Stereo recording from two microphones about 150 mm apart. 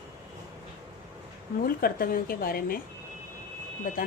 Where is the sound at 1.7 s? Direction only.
80° left.